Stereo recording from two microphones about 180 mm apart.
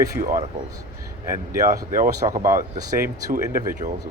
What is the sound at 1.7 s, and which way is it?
Speech, 50° right (ahead or behind).